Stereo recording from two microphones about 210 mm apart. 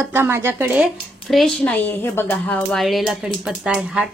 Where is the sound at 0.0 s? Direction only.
10° right (ahead or behind).